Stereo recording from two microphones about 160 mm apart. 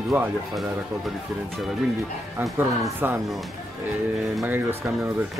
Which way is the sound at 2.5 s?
15° right (ahead or behind).